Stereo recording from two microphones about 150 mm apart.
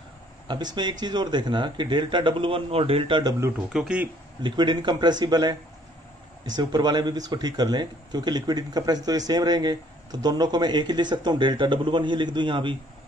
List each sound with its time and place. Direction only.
0.5 s speech: 30° right (ahead or behind)
3.7 s speech: 5° right (ahead or behind)
4.4 s speech: 30° right (ahead or behind)